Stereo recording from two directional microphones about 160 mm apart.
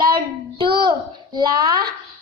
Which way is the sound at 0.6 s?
80° right.